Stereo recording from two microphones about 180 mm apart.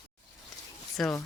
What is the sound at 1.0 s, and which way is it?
Speech, centre (ahead or behind).